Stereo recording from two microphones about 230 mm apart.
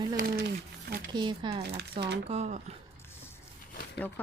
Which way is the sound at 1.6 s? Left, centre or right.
Right.